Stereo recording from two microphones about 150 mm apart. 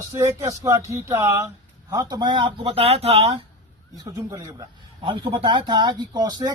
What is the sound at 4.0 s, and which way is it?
Speech, 25° right (ahead or behind).